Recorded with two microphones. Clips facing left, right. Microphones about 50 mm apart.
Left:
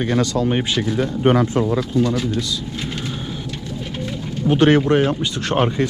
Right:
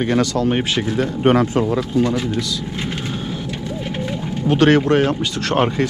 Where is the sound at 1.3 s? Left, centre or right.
Right.